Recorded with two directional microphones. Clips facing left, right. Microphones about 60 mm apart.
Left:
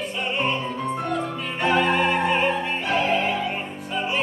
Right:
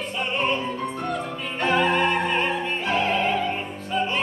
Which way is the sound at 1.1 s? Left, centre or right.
Centre.